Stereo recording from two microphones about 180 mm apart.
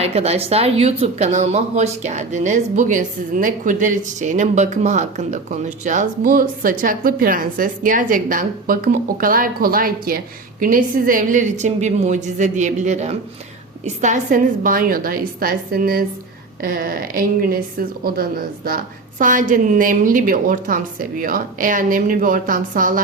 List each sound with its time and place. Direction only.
0.0 s a woman's voice: 35° right (ahead or behind)